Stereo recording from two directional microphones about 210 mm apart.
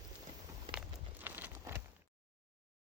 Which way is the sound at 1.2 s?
10° right (ahead or behind).